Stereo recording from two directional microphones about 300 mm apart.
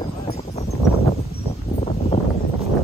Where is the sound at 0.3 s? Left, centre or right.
Left.